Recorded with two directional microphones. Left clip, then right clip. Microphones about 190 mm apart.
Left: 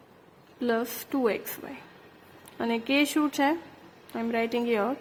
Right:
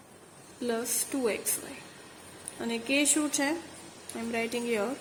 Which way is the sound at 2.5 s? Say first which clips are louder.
Left 3 dB; 35° left (ahead or behind).